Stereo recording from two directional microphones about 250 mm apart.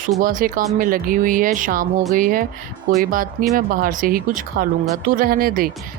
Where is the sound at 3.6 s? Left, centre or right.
Right.